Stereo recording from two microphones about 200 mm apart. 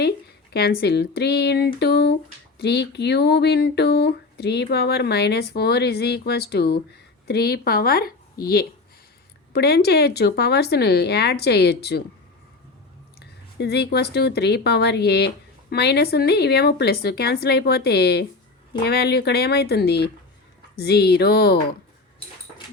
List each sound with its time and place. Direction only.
0.5 s speech: 55° left (ahead or behind)
13.1 s a woman's voice: 55° left (ahead or behind)